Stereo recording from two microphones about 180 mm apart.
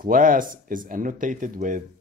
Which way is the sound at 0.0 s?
50° right (ahead or behind).